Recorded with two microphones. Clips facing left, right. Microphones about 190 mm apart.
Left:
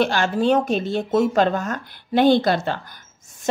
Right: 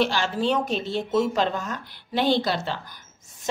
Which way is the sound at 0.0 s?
50° left (ahead or behind).